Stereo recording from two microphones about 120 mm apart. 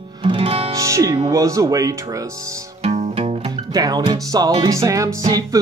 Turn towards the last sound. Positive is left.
turn(degrees=-30)  # may be behind; listen again after turning